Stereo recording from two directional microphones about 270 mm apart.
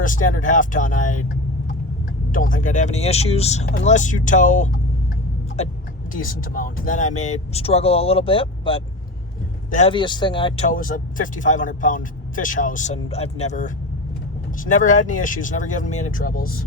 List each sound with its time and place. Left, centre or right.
0.0 s speech: left
2.3 s speech: left
6.1 s speech: left
10.7 s speech: left